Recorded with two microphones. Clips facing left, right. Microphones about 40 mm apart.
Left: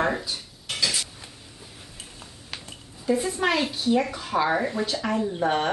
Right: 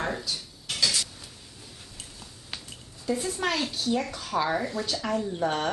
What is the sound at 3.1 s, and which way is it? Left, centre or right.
Speech, centre.